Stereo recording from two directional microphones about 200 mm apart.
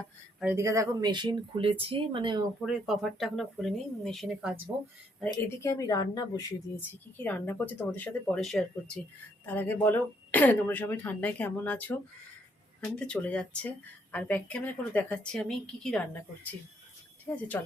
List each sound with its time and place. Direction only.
0.4 s speech: 15° right (ahead or behind)
2.6 s a woman's voice: centre (ahead or behind)
5.2 s a woman's voice: 10° left (ahead or behind)